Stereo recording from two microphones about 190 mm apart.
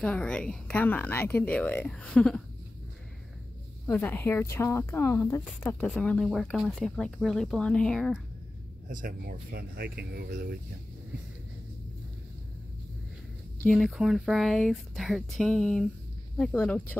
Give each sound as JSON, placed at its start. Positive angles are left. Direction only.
{"t": 0.0, "sound": "a woman's voice", "side_deg": 5}
{"t": 3.8, "sound": "speech", "side_deg": 10}
{"t": 8.8, "sound": "speech", "side_deg": -50}
{"t": 13.6, "sound": "speech", "side_deg": 0}